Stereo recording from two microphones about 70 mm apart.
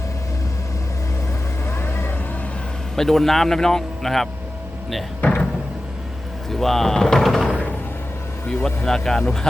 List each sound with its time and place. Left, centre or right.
1.6 s vehicle: left
2.9 s speech: centre
6.5 s speech: centre
8.4 s speech: centre